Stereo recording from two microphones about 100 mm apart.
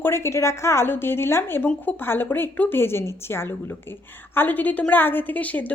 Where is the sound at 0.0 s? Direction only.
25° left (ahead or behind).